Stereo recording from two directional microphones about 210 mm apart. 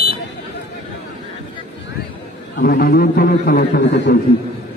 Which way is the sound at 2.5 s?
45° left (ahead or behind).